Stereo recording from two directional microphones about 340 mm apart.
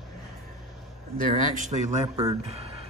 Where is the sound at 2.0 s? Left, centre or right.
Centre.